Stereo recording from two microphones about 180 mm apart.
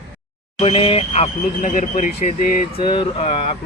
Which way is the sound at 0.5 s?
30° left (ahead or behind).